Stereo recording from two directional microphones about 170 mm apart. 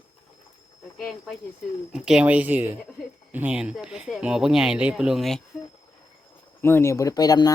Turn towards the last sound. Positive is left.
turn(degrees=20)  # may be behind; listen again after turning